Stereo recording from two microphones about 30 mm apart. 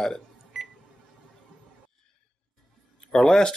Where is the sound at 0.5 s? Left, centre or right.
Centre.